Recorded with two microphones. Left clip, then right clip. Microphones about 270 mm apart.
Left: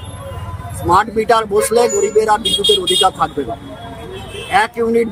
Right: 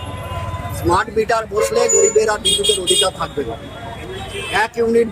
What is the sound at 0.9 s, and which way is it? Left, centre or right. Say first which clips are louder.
Speech: left 5 dB; left.